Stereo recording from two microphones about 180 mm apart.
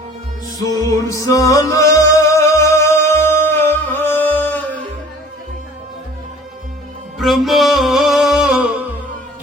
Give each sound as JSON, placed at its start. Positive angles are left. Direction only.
{"t": 0.9, "sound": "music", "side_deg": 20}
{"t": 7.2, "sound": "music", "side_deg": 0}